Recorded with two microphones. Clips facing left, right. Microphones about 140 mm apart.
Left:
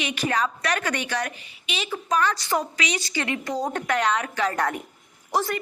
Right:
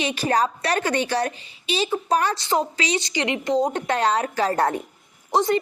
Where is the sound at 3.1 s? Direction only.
20° right (ahead or behind).